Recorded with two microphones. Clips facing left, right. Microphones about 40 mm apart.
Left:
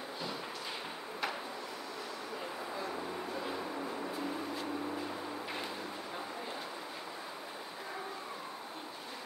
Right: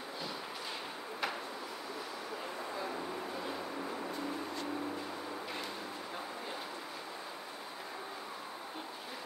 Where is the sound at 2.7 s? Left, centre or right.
Centre.